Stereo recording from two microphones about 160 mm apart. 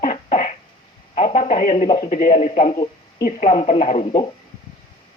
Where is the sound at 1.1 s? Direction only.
50° left (ahead or behind).